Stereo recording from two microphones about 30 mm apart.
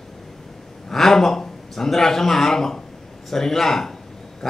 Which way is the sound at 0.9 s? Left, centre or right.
Centre.